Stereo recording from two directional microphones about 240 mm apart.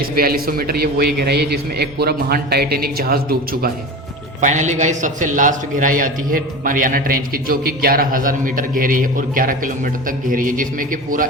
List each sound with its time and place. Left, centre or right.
0.2 s a man's voice: right